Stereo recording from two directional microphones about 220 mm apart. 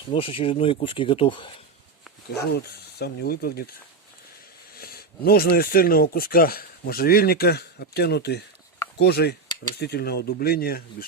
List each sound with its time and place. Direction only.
0.1 s speech: 25° left (ahead or behind)
2.4 s speech: 45° left (ahead or behind)
4.8 s speech: 45° left (ahead or behind)